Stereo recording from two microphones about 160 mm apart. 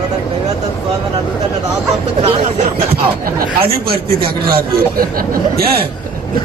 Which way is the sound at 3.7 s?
75° right (ahead or behind).